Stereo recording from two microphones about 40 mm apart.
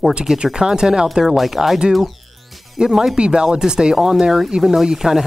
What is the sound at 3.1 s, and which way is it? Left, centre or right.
Speech, right.